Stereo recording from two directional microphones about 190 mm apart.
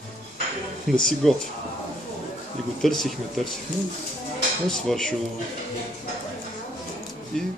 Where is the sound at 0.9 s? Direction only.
Centre (ahead or behind).